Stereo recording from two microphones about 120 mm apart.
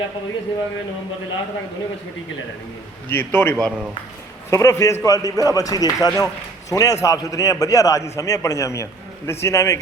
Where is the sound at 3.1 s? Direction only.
20° left (ahead or behind).